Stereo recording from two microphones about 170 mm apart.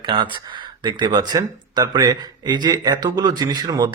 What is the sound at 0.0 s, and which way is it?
Speech, 25° right (ahead or behind).